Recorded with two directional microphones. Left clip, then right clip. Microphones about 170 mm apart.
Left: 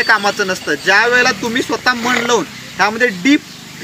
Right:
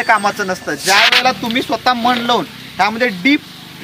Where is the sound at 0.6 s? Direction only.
35° right (ahead or behind).